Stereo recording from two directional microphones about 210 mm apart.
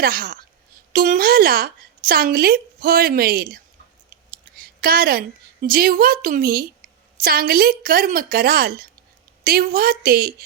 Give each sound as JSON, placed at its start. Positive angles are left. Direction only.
{"t": 0.0, "sound": "speech", "side_deg": -45}
{"t": 4.3, "sound": "a sound", "side_deg": -45}
{"t": 5.6, "sound": "speech", "side_deg": -45}